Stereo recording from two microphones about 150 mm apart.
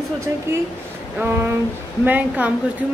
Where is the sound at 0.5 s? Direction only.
15° right (ahead or behind).